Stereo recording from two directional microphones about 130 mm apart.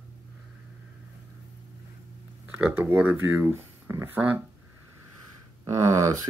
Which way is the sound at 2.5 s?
10° right (ahead or behind).